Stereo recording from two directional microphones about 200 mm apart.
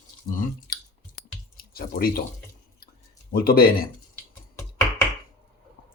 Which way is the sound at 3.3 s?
50° left (ahead or behind).